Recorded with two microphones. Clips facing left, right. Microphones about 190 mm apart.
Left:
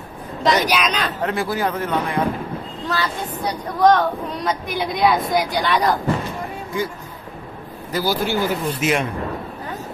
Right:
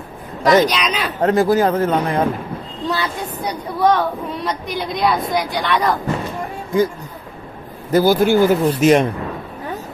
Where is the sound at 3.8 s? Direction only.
5° right (ahead or behind).